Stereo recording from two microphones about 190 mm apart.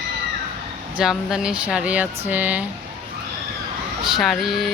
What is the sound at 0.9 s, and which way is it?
Speech, 5° right (ahead or behind).